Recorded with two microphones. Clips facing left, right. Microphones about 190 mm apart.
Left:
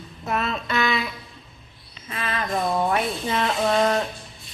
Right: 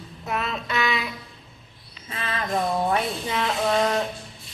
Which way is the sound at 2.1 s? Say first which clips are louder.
Left 2 dB; 30° right (ahead or behind).